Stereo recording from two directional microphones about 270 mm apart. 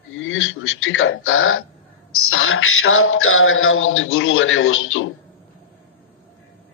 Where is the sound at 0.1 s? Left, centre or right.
Left.